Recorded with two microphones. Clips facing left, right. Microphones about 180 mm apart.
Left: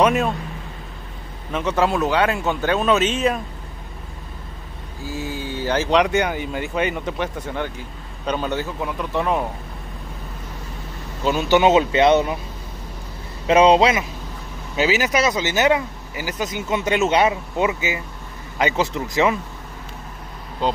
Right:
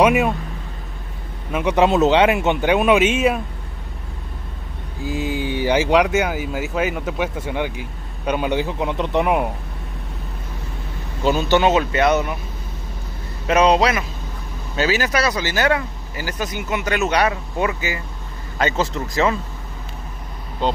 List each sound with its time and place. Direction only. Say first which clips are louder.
0.0 s speech: right 2 dB; 10° right (ahead or behind)
1.5 s speech: right 4 dB; 15° right (ahead or behind)
5.0 s speech: right 5 dB; 15° right (ahead or behind)
11.4 s speech: left 3 dB; 15° left (ahead or behind)
13.5 s speech: left 2 dB; 25° left (ahead or behind)